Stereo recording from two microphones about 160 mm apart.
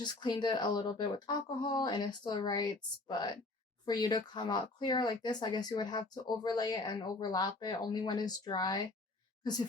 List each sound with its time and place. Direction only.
0.0 s speech: 25° left (ahead or behind)
3.8 s speech: 25° left (ahead or behind)